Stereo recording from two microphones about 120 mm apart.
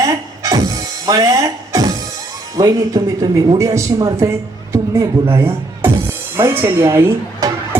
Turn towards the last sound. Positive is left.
turn(degrees=-30)  # may be behind; listen again after turning